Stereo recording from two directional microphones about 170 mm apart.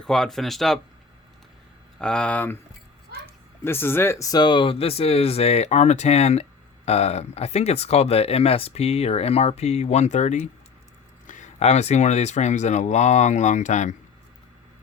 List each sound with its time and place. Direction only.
0.0 s speech: centre (ahead or behind)
2.0 s speech: 5° left (ahead or behind)
3.6 s speech: 15° left (ahead or behind); by 13.9 s 45° left (ahead or behind)